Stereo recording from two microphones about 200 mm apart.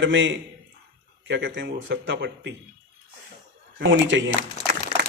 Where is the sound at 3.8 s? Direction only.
70° right (ahead or behind).